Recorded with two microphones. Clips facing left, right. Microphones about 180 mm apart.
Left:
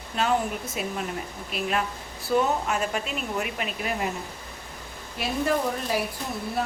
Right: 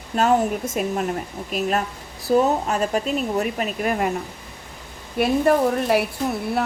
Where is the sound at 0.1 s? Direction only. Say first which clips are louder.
Right 6 dB; 40° right (ahead or behind).